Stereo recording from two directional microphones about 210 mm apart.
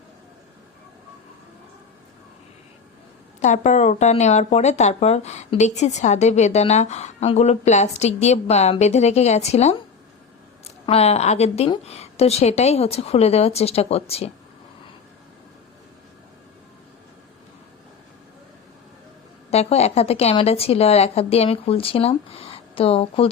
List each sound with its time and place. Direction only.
3.4 s a woman's voice: 35° left (ahead or behind)
19.5 s a woman's voice: 30° left (ahead or behind)